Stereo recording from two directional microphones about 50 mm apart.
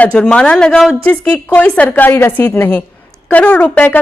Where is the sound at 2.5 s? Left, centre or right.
Left.